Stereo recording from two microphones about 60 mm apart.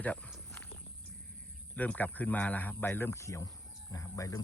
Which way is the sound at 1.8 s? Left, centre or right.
Left.